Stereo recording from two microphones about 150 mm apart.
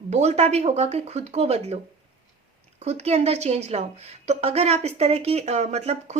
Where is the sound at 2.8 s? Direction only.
45° right (ahead or behind).